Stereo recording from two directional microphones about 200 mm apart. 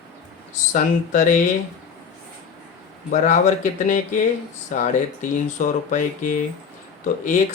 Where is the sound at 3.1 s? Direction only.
35° left (ahead or behind).